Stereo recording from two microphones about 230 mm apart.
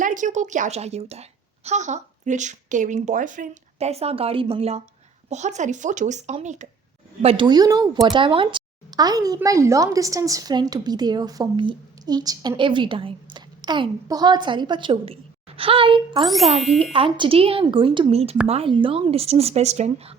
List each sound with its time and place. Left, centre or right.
0.0 s a woman's voice: right
16.2 s speech: centre
16.9 s a child's voice: right